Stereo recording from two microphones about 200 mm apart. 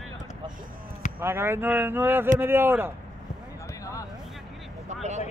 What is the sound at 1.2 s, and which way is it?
Speech, 10° right (ahead or behind).